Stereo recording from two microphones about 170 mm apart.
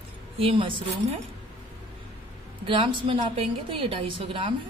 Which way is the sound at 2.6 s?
30° right (ahead or behind).